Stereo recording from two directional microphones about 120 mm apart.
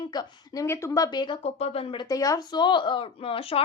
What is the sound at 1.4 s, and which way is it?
Speech, 60° left (ahead or behind).